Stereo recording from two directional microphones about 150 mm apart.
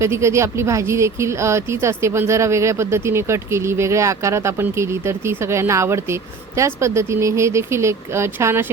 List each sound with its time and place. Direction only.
0.0 s speech: 20° right (ahead or behind)